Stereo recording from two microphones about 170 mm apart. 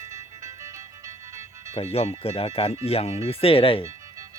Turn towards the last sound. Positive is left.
turn(degrees=30)  # may be behind; listen again after turning